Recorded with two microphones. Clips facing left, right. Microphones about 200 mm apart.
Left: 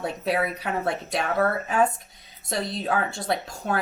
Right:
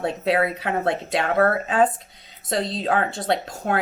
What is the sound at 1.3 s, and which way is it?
Speech, 60° right (ahead or behind).